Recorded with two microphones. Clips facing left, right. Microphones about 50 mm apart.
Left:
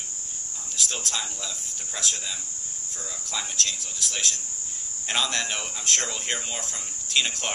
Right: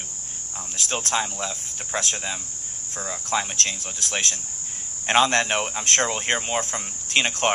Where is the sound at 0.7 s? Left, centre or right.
Right.